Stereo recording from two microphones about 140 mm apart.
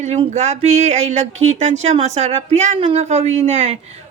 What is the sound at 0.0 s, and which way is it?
Speech, 50° right (ahead or behind).